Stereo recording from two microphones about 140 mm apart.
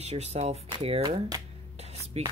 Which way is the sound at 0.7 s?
35° right (ahead or behind).